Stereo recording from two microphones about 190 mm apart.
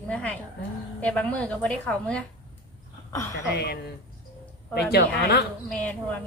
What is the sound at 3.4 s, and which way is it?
A woman's voice, 60° left (ahead or behind).